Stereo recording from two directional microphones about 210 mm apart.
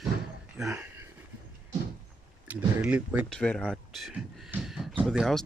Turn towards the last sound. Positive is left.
turn(degrees=0)  # may be behind; listen again after turning